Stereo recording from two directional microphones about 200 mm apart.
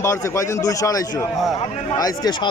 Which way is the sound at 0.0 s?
15° left (ahead or behind).